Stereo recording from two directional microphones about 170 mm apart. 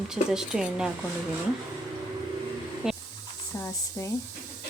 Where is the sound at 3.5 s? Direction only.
20° left (ahead or behind).